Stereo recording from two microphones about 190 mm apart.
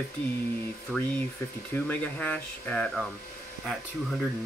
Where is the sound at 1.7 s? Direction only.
10° left (ahead or behind).